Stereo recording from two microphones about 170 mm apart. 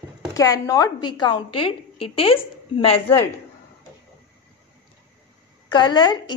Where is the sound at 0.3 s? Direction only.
20° left (ahead or behind).